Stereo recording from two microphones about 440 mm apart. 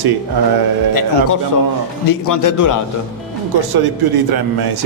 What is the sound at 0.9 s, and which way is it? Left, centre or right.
A man's voice, left.